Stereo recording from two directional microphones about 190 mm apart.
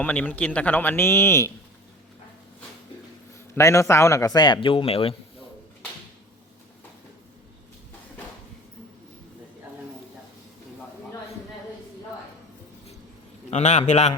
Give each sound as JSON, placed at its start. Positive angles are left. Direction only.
{"t": 0.0, "sound": "speech", "side_deg": 10}
{"t": 3.5, "sound": "a man's voice", "side_deg": 15}
{"t": 13.5, "sound": "a man's voice", "side_deg": 35}